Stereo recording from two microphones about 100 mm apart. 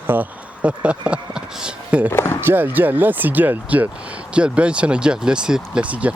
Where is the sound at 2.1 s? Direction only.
25° left (ahead or behind).